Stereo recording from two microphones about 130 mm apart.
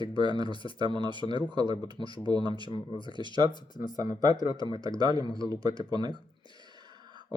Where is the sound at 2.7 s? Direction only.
40° left (ahead or behind).